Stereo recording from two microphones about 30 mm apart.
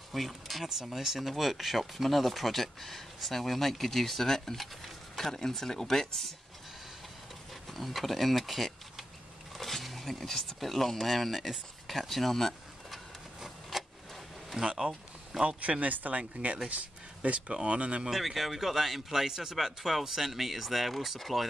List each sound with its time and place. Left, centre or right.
0.1 s speech: centre
0.7 s speech: centre
7.6 s speech: centre
9.5 s a sound: centre
10.6 s speech: centre
11.9 s a sound: centre
13.4 s a sound: centre
14.8 s a sound: centre
15.4 s speech: right
15.8 s speech: right
16.6 s speech: right
18.1 s speech: centre